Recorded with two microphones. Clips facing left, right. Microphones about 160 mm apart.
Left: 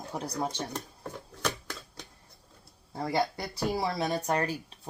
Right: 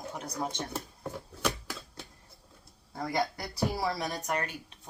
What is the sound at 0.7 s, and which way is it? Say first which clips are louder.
Shuffling cards: right 1 dB; 5° right (ahead or behind).